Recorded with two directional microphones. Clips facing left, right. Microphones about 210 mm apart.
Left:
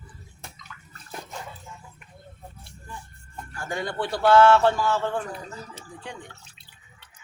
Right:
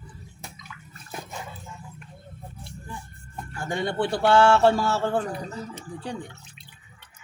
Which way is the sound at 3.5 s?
25° right (ahead or behind).